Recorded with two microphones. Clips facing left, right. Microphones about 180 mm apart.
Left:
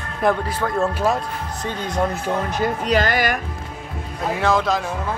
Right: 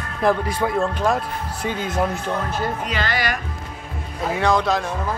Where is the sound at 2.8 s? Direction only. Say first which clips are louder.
Left 5 dB; 45° left (ahead or behind).